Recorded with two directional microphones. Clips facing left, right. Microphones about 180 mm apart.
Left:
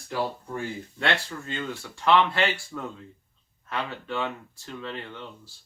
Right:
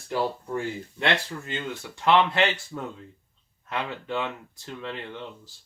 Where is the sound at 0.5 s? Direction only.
20° right (ahead or behind).